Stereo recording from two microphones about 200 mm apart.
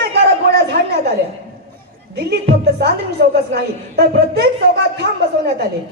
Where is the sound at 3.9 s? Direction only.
55° right (ahead or behind).